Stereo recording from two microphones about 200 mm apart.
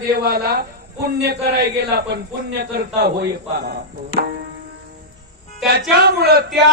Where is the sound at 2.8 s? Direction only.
50° right (ahead or behind).